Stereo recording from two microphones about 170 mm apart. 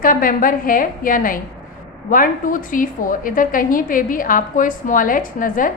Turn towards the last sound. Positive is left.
turn(degrees=50)  # may be behind; listen again after turning